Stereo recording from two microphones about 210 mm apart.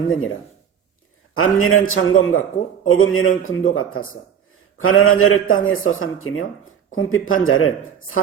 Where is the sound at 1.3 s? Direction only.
80° left.